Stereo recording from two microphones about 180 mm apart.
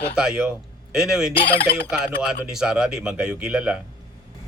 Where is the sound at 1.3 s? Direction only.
30° left (ahead or behind).